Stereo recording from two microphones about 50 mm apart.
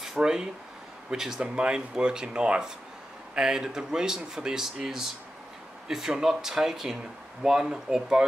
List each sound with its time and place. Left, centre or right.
0.0 s a sound: centre
1.1 s speech: centre
1.4 s speech: centre